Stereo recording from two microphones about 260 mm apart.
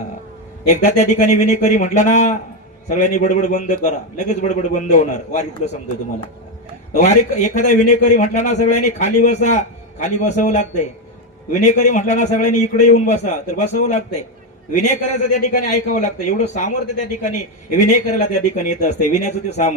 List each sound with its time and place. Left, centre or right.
0.7 s a man's voice: left
6.9 s a man's voice: left